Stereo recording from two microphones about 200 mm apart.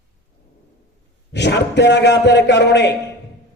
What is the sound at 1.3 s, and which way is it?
A man's voice, 60° left (ahead or behind).